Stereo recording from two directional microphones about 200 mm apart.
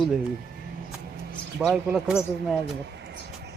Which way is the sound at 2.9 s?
55° right (ahead or behind).